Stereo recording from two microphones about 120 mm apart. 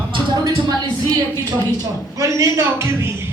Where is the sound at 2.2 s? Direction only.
25° right (ahead or behind).